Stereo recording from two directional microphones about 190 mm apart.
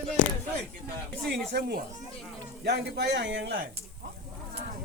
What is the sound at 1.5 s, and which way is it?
Speech, 55° right (ahead or behind).